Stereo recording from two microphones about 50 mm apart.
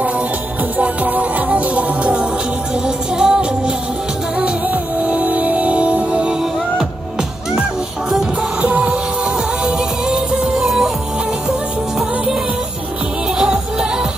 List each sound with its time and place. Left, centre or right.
0.7 s music: right
8.6 s music: right